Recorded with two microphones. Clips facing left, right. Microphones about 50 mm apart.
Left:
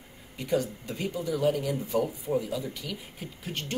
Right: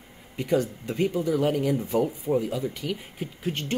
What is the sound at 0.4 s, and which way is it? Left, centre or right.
Speech, right.